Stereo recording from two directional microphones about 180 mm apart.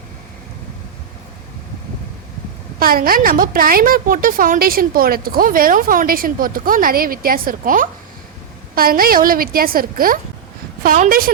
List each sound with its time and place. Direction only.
2.7 s a woman's voice: 55° right (ahead or behind)